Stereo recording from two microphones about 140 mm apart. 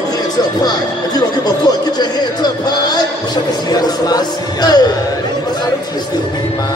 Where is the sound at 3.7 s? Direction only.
30° left (ahead or behind).